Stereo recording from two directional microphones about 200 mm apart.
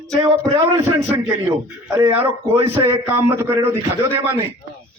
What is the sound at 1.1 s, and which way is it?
A man's voice, 15° right (ahead or behind).